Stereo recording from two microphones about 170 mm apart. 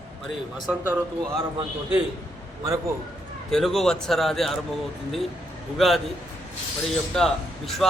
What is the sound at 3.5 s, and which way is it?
A man's voice, centre (ahead or behind).